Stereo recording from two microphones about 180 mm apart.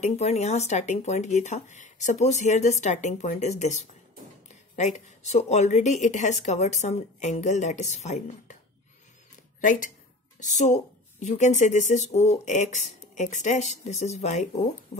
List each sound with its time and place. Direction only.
0.0 s a woman's voice: 35° left (ahead or behind)
9.6 s a woman's voice: 45° left (ahead or behind)